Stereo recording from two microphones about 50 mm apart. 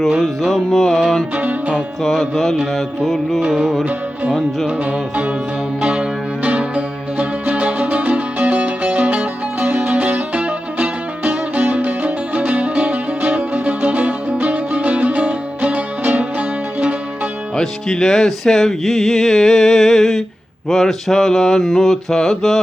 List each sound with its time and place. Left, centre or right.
0.2 s music: centre
1.4 s music: right
2.0 s music: centre
4.6 s music: right
17.6 s music: centre